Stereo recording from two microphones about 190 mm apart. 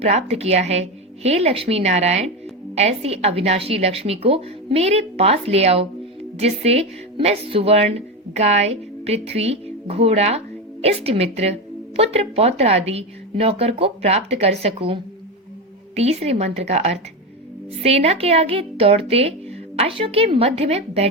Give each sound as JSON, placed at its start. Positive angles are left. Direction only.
{"t": 0.0, "sound": "a woman's voice", "side_deg": -35}